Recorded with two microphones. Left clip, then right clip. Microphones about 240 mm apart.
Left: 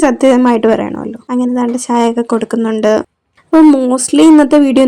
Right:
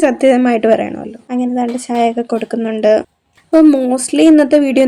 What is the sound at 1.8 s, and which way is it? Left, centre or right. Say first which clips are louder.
Speech: left 2 dB; left.